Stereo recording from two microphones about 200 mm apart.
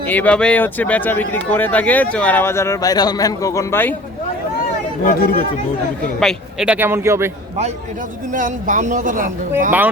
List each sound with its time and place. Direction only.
0.1 s speech: 5° left (ahead or behind)
5.0 s speech: 45° left (ahead or behind)
6.1 s speech: centre (ahead or behind)
8.3 s speech: 40° right (ahead or behind)